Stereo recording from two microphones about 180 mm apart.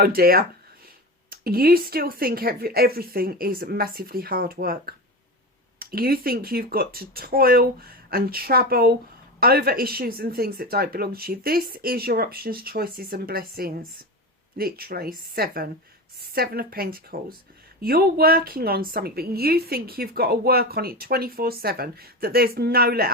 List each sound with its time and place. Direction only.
0.0 s a woman's voice: 55° right (ahead or behind)